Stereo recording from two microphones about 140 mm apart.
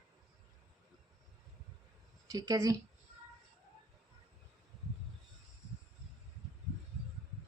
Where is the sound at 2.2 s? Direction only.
25° right (ahead or behind).